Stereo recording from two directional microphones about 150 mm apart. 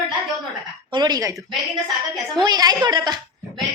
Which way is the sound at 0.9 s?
25° right (ahead or behind).